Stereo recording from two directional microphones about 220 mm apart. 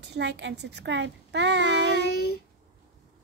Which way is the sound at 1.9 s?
45° left (ahead or behind).